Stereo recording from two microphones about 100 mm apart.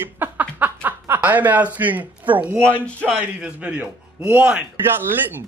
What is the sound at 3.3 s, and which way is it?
Speech, 10° right (ahead or behind).